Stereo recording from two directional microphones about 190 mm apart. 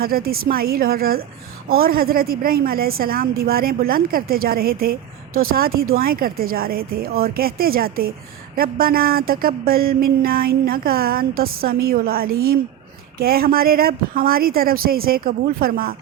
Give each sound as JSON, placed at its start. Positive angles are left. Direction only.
{"t": 0.0, "sound": "a woman's voice", "side_deg": -50}